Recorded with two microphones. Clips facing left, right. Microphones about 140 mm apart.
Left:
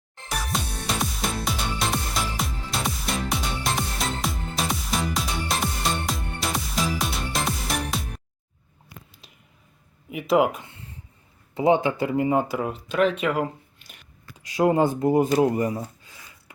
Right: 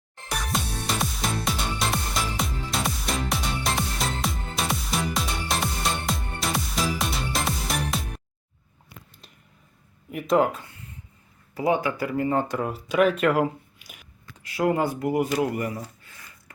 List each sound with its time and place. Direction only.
0.3 s music: centre (ahead or behind)
10.1 s speech: 5° left (ahead or behind)
10.7 s a sound: 30° left (ahead or behind)
11.5 s speech: 25° left (ahead or behind); by 14.1 s 10° right (ahead or behind)
14.3 s speech: 20° left (ahead or behind)
16.0 s a sound: 15° left (ahead or behind)